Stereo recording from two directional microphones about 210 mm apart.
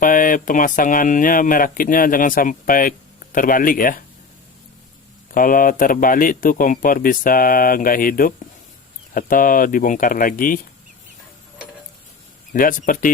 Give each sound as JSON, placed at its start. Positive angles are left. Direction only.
{"t": 0.0, "sound": "speech", "side_deg": 40}
{"t": 5.3, "sound": "speech", "side_deg": 40}
{"t": 12.5, "sound": "speech", "side_deg": 40}